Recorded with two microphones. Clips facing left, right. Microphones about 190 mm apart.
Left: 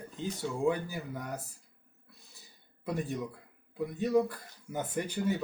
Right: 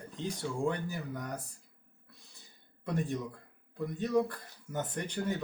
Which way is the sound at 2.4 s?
5° left (ahead or behind).